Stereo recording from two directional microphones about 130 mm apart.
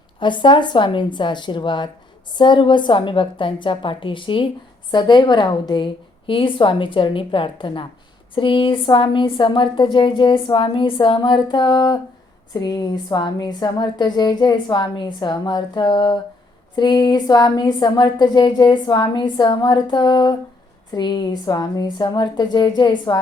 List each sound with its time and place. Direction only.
0.2 s a woman's voice: 35° left (ahead or behind)